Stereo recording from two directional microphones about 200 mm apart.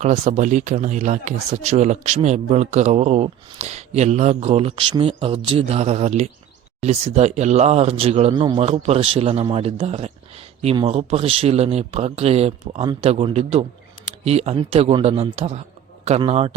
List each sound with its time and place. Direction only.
0.0 s speech: 35° right (ahead or behind)